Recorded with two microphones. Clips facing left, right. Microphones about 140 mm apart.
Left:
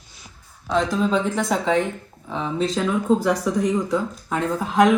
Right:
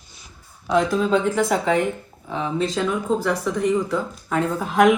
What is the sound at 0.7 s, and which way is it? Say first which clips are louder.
Speech: right 2 dB; 5° right (ahead or behind).